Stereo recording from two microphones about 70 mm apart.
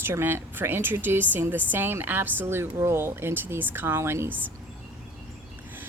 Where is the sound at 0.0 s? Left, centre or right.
Right.